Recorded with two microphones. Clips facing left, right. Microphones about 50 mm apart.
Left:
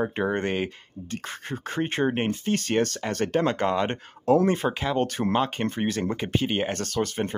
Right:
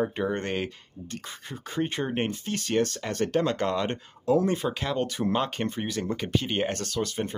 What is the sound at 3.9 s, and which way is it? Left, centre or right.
Speech, left.